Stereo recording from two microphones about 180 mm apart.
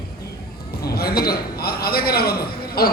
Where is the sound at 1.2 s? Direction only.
60° left (ahead or behind).